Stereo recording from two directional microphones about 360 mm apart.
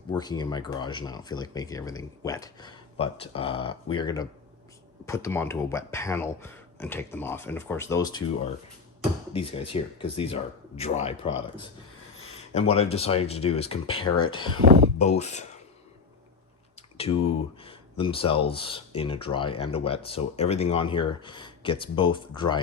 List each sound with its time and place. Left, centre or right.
0.1 s speech: centre
9.3 s speech: centre
12.5 s speech: centre
17.0 s speech: centre